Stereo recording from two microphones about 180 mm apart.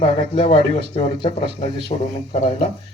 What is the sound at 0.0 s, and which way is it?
A man's voice, 30° left (ahead or behind).